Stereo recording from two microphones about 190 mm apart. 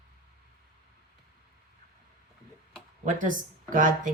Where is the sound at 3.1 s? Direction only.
40° right (ahead or behind).